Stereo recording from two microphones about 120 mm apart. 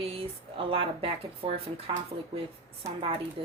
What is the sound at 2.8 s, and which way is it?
Speech, 55° right (ahead or behind).